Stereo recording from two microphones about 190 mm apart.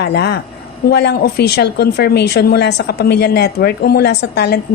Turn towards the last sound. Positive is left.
turn(degrees=60)  # may be behind; listen again after turning